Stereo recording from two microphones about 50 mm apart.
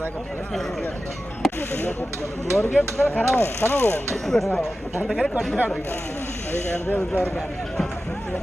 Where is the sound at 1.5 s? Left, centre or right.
Left.